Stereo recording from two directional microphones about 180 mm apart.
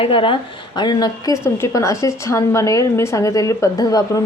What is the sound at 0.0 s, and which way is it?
A woman's voice, 30° left (ahead or behind).